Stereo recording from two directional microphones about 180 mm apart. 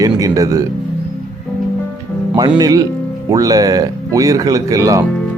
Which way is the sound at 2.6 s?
20° right (ahead or behind).